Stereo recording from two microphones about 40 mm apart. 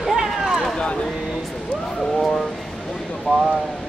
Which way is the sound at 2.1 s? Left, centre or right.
Centre.